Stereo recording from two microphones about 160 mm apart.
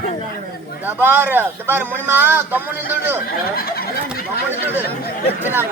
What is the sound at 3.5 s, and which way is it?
Snicker, 70° left (ahead or behind).